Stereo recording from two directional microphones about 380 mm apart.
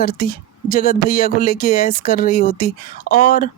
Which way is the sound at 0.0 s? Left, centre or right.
Left.